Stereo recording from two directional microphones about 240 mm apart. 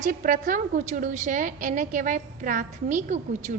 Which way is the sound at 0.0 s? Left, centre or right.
Right.